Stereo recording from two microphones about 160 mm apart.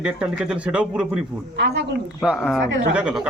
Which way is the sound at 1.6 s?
90° right.